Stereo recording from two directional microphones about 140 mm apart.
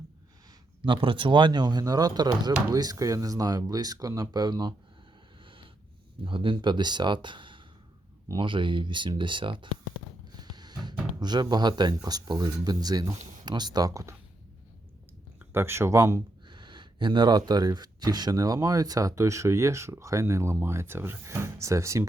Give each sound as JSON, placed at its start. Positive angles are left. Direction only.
{"t": 0.8, "sound": "speech", "side_deg": -35}
{"t": 6.2, "sound": "speech", "side_deg": -35}
{"t": 10.4, "sound": "music", "side_deg": -30}
{"t": 11.2, "sound": "speech", "side_deg": -30}
{"t": 15.4, "sound": "speech", "side_deg": -15}
{"t": 16.5, "sound": "speech", "side_deg": -35}